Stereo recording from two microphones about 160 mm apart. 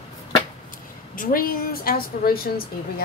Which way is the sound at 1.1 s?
60° left (ahead or behind).